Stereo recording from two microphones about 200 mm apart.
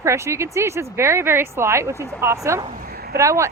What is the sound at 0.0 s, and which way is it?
Speech, 15° right (ahead or behind).